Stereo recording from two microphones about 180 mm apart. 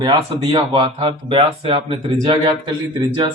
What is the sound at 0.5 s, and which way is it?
Speech, 25° right (ahead or behind).